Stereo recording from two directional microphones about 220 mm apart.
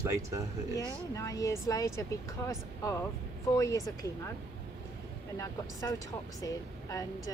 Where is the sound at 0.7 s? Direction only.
15° left (ahead or behind).